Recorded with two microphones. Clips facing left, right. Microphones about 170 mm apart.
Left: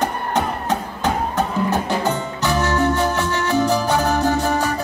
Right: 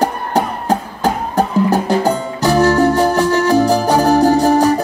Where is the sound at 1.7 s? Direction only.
35° right (ahead or behind).